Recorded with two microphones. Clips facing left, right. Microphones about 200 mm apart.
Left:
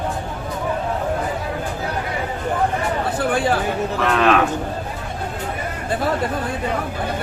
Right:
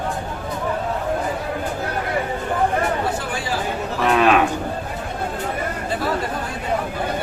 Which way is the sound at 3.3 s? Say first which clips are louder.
Left 8 dB; 55° left (ahead or behind).